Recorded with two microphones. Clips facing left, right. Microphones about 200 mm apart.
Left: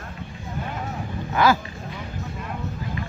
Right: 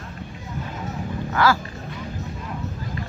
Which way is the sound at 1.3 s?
20° left (ahead or behind).